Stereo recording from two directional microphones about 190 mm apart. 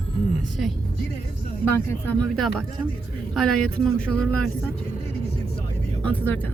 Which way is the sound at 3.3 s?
Centre (ahead or behind).